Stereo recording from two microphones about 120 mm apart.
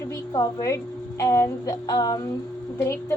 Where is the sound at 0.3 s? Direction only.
25° left (ahead or behind).